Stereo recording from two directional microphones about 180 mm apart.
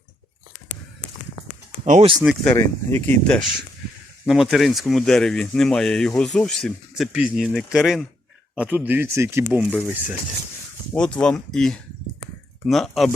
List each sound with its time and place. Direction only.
1.8 s speech: 35° right (ahead or behind)
2.2 s speech: 5° left (ahead or behind)
10.9 s speech: 5° left (ahead or behind)